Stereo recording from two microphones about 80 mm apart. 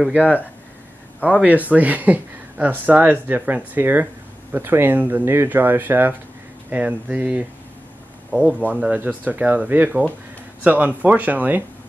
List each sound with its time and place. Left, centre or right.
1.2 s speech: centre
8.5 s speech: centre